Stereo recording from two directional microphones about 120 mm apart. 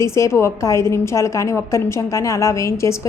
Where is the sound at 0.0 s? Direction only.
25° left (ahead or behind).